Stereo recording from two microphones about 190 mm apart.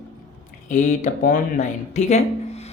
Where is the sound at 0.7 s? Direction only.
40° left (ahead or behind).